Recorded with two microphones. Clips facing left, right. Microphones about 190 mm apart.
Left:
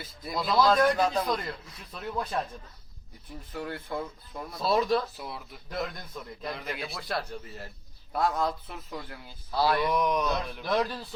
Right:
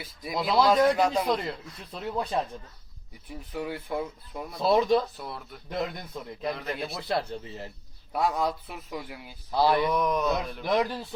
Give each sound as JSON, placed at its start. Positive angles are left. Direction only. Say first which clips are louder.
{"t": 0.0, "sound": "a man's voice", "louder": "right 2 dB", "side_deg": -10}
{"t": 1.3, "sound": "speech", "louder": "right 3 dB", "side_deg": -25}
{"t": 3.5, "sound": "a man's voice", "louder": "right 3 dB", "side_deg": -10}
{"t": 4.6, "sound": "speech", "louder": "right 3 dB", "side_deg": -20}
{"t": 5.1, "sound": "speech", "louder": "right 1 dB", "side_deg": 0}
{"t": 5.6, "sound": "speech", "louder": "right 3 dB", "side_deg": -20}
{"t": 6.4, "sound": "speech", "louder": "right 4 dB", "side_deg": 0}
{"t": 6.9, "sound": "speech", "louder": "right 4 dB", "side_deg": -25}
{"t": 8.1, "sound": "a man's voice", "louder": "right 1 dB", "side_deg": -10}
{"t": 9.9, "sound": "speech", "louder": "right 1 dB", "side_deg": 0}
{"t": 10.6, "sound": "a man's voice", "louder": "right 2 dB", "side_deg": -15}